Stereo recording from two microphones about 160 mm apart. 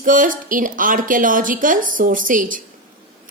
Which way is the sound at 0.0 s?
55° right (ahead or behind).